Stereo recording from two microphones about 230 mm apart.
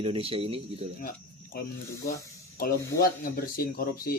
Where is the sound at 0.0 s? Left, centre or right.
Right.